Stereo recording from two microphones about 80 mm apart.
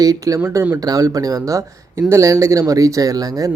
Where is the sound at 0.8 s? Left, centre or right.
Right.